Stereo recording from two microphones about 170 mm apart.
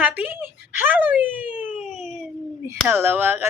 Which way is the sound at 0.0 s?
10° right (ahead or behind).